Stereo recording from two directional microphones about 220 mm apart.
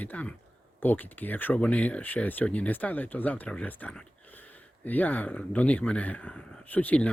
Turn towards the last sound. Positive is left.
turn(degrees=5)  # may be behind; listen again after turning